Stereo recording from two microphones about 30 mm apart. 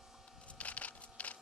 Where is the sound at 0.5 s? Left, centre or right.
Left.